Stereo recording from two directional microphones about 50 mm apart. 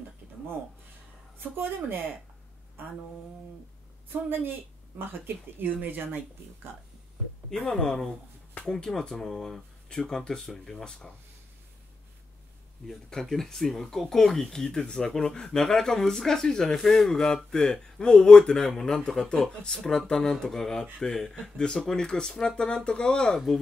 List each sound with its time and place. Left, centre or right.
1.4 s speech: right
4.1 s speech: right
7.4 s speech: centre
13.1 s speech: centre